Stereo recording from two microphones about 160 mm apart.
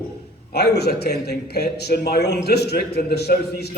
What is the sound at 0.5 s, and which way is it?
A man's voice, 90° left.